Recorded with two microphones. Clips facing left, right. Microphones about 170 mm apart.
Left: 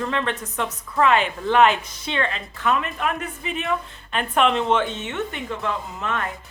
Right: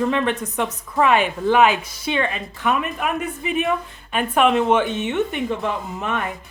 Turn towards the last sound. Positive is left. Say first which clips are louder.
# right 2 dB
turn(degrees=-15)  # may be behind; listen again after turning